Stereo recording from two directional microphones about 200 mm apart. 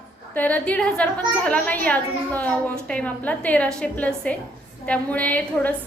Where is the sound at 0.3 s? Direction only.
10° left (ahead or behind).